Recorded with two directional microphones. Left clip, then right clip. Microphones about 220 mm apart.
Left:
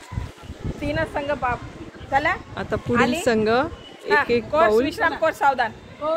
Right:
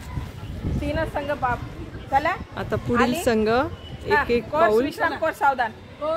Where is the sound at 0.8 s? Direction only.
35° left (ahead or behind).